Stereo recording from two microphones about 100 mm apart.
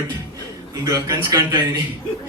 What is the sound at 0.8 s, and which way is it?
Speech, 35° right (ahead or behind).